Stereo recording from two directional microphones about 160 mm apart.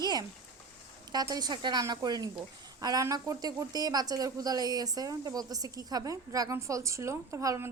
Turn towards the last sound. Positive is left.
turn(degrees=-20)  # may be behind; listen again after turning